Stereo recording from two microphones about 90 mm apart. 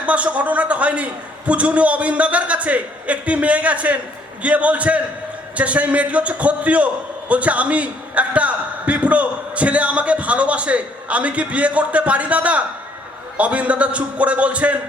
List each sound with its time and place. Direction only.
0.0 s a man's voice: 15° right (ahead or behind)